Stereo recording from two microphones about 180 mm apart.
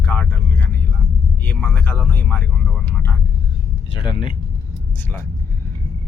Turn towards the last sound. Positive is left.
turn(degrees=30)  # may be behind; listen again after turning